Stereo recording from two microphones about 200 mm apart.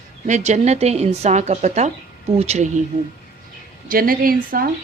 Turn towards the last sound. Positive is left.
turn(degrees=-45)  # may be behind; listen again after turning